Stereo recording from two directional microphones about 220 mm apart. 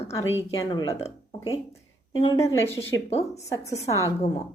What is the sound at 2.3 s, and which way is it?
Speech, 15° left (ahead or behind).